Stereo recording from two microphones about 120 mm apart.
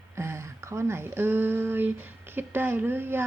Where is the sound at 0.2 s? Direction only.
20° right (ahead or behind).